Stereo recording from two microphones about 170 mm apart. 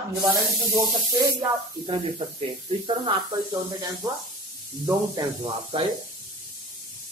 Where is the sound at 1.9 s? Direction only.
35° right (ahead or behind).